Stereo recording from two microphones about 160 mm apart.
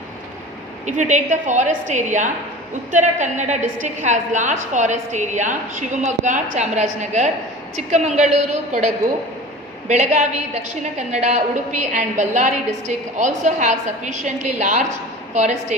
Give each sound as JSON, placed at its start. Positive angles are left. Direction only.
{"t": 0.9, "sound": "a woman's voice", "side_deg": -50}
{"t": 9.9, "sound": "a woman's voice", "side_deg": -45}